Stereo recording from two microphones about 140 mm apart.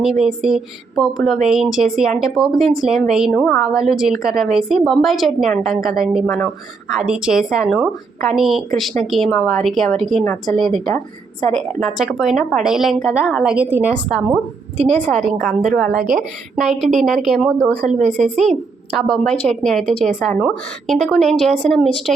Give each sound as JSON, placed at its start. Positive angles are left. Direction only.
{"t": 0.0, "sound": "a woman's voice", "side_deg": 0}
{"t": 3.3, "sound": "a woman's voice", "side_deg": 10}
{"t": 3.7, "sound": "a woman's voice", "side_deg": 0}
{"t": 6.9, "sound": "a woman's voice", "side_deg": -5}
{"t": 17.8, "sound": "speech", "side_deg": -60}
{"t": 18.9, "sound": "a woman's voice", "side_deg": 5}